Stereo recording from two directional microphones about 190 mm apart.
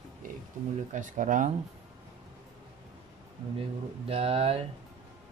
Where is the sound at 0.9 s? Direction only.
40° right (ahead or behind).